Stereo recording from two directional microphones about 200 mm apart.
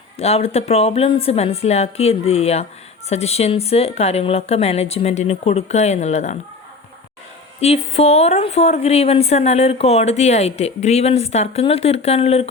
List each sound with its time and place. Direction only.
0.2 s a woman's voice: 30° left (ahead or behind)
7.6 s a woman's voice: 30° left (ahead or behind)